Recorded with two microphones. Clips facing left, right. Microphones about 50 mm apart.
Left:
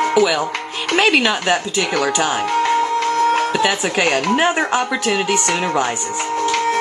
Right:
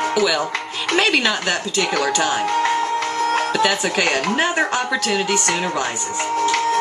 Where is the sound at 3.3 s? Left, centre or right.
Centre.